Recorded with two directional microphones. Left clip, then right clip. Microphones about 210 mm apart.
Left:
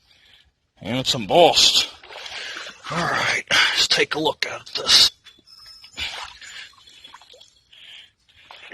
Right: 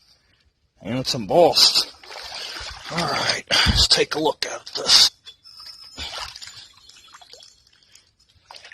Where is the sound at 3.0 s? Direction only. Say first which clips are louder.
Left 2 dB; 10° right (ahead or behind).